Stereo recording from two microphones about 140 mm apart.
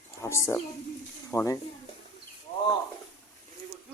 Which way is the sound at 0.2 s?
20° left (ahead or behind).